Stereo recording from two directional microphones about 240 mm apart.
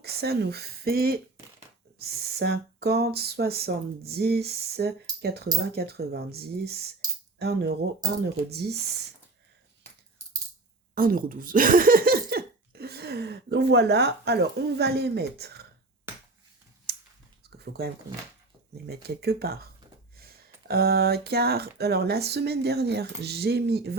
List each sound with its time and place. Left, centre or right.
0.0 s speech: right
10.9 s speech: right
17.4 s a sound: right
18.9 s speech: right